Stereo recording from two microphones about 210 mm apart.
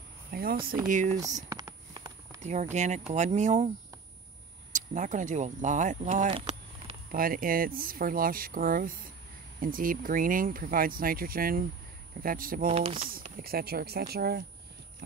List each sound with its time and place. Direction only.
0.3 s a sound: 45° right (ahead or behind)
0.8 s speech: 35° right (ahead or behind)
1.5 s a sound: 15° right (ahead or behind)
2.4 s speech: 35° right (ahead or behind)
4.7 s speech: 35° right (ahead or behind)
7.1 s speech: 45° right (ahead or behind)
13.1 s speech: 45° right (ahead or behind)